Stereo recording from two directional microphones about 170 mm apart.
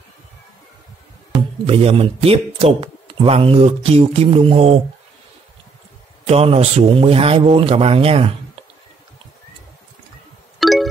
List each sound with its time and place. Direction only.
1.7 s speech: 35° right (ahead or behind)
6.2 s speech: 35° right (ahead or behind)
10.6 s music: centre (ahead or behind)